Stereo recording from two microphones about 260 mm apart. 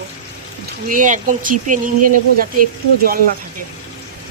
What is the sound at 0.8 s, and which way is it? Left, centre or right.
Speech, right.